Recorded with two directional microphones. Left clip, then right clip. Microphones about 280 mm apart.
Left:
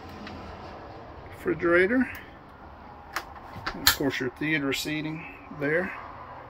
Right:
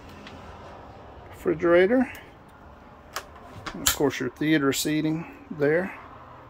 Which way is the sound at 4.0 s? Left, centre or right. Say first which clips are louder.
Right 3 dB; centre.